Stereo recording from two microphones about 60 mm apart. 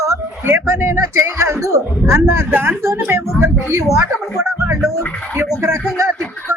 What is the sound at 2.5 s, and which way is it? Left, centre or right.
Speech, right.